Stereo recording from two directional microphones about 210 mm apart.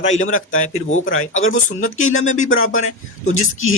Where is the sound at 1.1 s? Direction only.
75° left (ahead or behind).